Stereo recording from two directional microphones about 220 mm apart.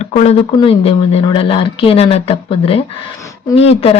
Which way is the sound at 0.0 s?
30° left (ahead or behind).